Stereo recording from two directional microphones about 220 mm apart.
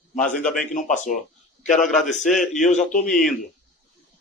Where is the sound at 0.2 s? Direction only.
5° left (ahead or behind).